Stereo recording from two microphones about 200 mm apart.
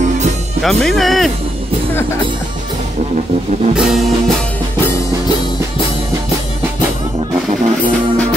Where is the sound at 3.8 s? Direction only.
Centre (ahead or behind).